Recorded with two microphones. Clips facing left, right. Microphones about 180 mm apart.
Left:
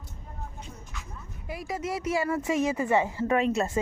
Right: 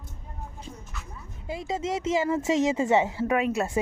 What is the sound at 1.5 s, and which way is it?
A woman's voice, 25° right (ahead or behind).